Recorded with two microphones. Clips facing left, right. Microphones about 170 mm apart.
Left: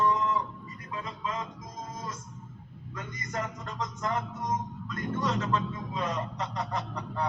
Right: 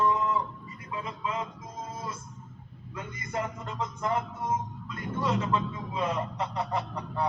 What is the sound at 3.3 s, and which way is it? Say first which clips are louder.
Speech: right 2 dB; 10° right (ahead or behind).